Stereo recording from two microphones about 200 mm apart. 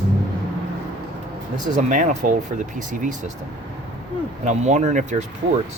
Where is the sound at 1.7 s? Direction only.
40° right (ahead or behind).